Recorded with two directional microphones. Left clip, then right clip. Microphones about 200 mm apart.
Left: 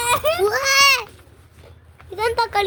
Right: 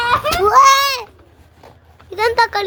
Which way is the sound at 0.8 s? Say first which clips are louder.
Left 4 dB; 15° left (ahead or behind).